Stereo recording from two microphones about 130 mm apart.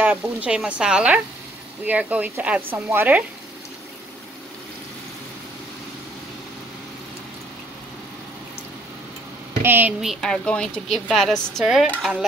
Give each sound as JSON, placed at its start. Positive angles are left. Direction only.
{"t": 0.0, "sound": "speech", "side_deg": -10}
{"t": 9.6, "sound": "speech", "side_deg": -15}
{"t": 10.0, "sound": "a woman's voice", "side_deg": 5}